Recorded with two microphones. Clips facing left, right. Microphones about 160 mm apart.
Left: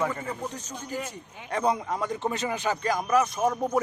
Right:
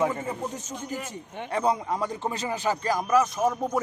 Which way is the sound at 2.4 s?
30° right (ahead or behind).